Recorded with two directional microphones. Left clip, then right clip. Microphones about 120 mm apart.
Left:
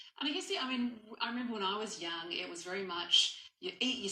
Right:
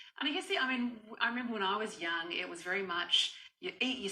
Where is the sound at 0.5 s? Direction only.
40° right (ahead or behind).